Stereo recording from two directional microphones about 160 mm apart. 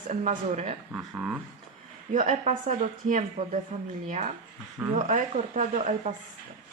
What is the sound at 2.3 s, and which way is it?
A woman's voice, 45° right (ahead or behind).